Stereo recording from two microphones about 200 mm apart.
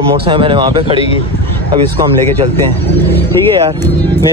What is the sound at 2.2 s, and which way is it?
Speech, 10° left (ahead or behind).